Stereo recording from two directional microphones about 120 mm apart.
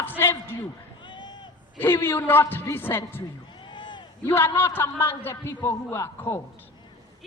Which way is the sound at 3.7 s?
40° left (ahead or behind).